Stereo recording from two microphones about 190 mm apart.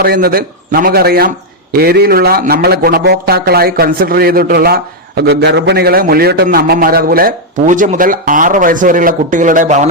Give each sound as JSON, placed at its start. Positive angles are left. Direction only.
{"t": 0.0, "sound": "a man's voice", "side_deg": -50}